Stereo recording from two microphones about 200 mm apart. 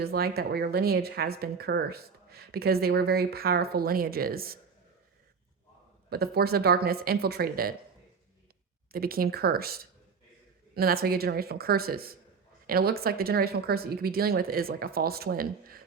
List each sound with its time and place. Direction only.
0.0 s speech: 50° right (ahead or behind)
6.1 s speech: 50° right (ahead or behind)
8.9 s speech: 50° right (ahead or behind)